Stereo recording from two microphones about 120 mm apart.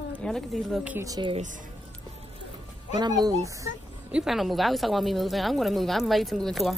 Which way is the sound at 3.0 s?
35° right (ahead or behind).